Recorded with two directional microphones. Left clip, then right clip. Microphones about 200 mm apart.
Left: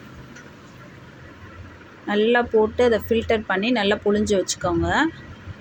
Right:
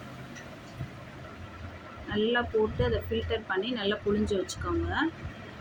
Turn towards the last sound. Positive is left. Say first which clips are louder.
# left 10 dB
turn(degrees=35)  # may be behind; listen again after turning